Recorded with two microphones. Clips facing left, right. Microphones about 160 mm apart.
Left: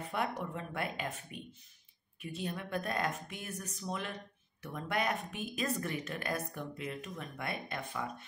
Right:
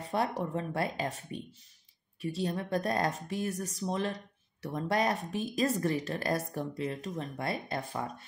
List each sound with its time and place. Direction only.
0.0 s speech: 35° right (ahead or behind)